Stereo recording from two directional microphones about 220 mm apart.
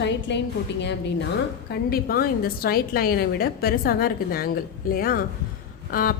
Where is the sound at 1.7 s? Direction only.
45° left (ahead or behind).